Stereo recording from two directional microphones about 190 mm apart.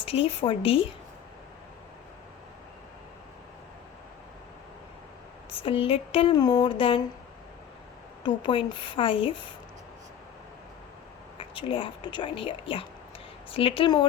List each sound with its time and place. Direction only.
0.0 s a woman's voice: 30° left (ahead or behind)
5.5 s a woman's voice: 30° left (ahead or behind)
8.2 s a woman's voice: 25° left (ahead or behind)
11.3 s a woman's voice: 30° left (ahead or behind)